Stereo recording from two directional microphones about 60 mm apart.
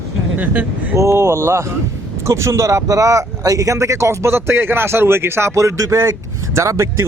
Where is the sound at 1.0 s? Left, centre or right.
Right.